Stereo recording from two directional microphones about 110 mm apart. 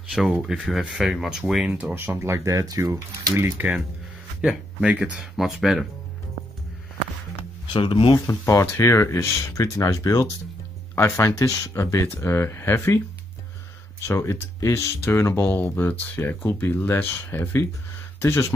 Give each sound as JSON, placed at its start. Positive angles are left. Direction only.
{"t": 0.1, "sound": "speech", "side_deg": -5}
{"t": 7.6, "sound": "speech", "side_deg": 50}
{"t": 8.3, "sound": "speech", "side_deg": 25}
{"t": 14.0, "sound": "speech", "side_deg": 25}